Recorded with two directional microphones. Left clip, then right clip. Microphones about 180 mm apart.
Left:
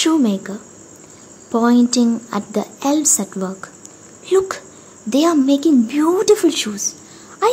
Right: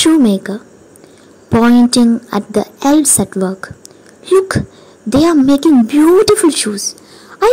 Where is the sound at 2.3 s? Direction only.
25° right (ahead or behind).